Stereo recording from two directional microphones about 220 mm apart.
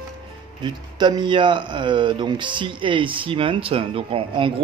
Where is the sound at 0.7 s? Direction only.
20° right (ahead or behind).